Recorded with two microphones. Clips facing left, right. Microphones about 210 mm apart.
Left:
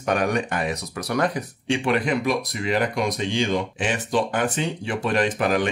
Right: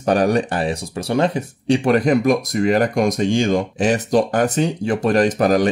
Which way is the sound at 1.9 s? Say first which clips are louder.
Right 7 dB; 40° right (ahead or behind).